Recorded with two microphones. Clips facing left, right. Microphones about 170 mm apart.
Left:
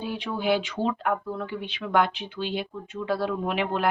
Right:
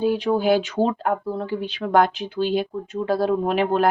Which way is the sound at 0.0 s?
40° right (ahead or behind).